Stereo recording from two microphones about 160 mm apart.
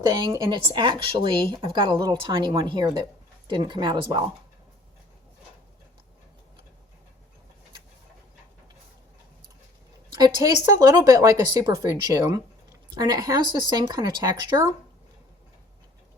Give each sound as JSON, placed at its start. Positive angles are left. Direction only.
{"t": 0.3, "sound": "speech", "side_deg": -30}
{"t": 10.1, "sound": "speech", "side_deg": -25}